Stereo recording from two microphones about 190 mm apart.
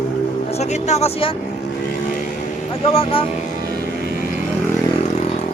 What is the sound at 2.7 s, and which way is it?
Speech, 30° left (ahead or behind).